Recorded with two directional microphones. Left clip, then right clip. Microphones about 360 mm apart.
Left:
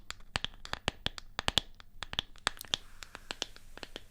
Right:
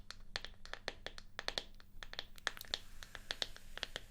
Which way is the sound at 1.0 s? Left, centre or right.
Left.